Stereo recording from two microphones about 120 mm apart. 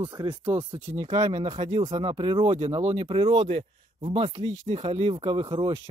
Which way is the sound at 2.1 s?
45° right (ahead or behind).